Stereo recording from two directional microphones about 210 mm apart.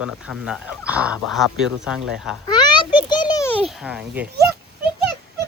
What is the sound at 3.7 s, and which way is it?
Speech, 5° right (ahead or behind).